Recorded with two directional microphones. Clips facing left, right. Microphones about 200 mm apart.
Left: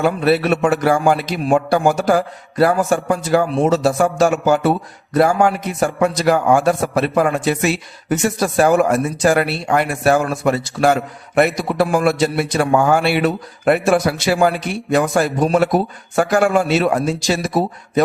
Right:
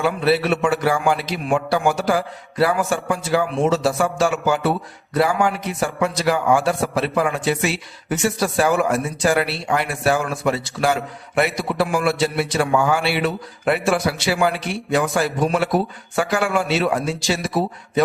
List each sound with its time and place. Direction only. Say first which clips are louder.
0.0 s speech: left 3 dB; 45° left (ahead or behind)